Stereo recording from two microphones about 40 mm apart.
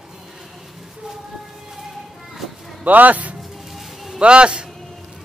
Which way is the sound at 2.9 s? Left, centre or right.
Right.